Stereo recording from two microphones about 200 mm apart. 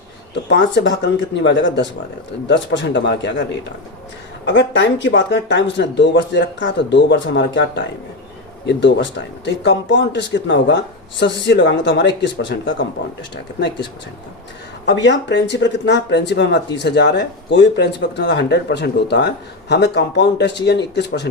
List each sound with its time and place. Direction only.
0.3 s speech: 60° left (ahead or behind)
4.4 s speech: 65° left (ahead or behind)
14.8 s speech: 60° left (ahead or behind)